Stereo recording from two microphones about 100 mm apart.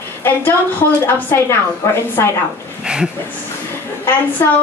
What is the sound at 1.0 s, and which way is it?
A woman's voice, 25° left (ahead or behind).